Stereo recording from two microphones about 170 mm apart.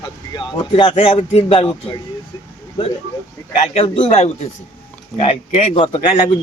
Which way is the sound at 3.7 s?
35° left (ahead or behind).